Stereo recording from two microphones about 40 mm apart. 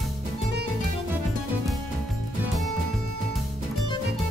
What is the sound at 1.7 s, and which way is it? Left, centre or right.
Music, centre.